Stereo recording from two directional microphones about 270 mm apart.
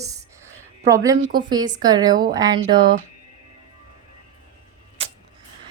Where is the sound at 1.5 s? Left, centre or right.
Centre.